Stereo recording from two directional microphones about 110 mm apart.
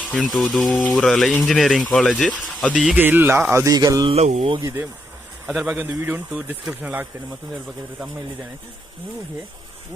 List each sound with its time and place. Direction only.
0.1 s speech: 5° left (ahead or behind)
2.7 s speech: 10° right (ahead or behind)
3.5 s music: 30° right (ahead or behind)
4.1 s speech: 85° right
4.6 s speech: 20° right (ahead or behind)
5.5 s speech: centre (ahead or behind)
6.1 s speech: 15° right (ahead or behind)